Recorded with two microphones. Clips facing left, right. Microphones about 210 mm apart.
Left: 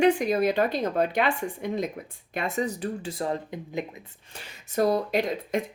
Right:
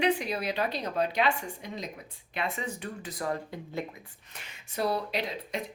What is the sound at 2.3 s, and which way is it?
Speech, 45° left (ahead or behind).